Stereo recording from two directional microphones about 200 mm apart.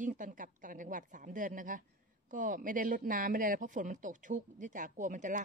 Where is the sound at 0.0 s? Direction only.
40° right (ahead or behind).